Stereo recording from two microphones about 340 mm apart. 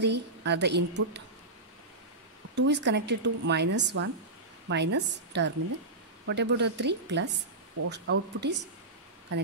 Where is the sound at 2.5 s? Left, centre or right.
Right.